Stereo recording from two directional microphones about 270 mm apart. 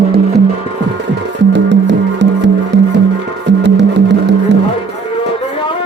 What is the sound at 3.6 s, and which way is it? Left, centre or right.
Music, right.